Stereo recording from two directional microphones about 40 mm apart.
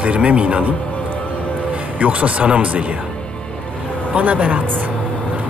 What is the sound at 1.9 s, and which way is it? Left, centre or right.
Speech, right.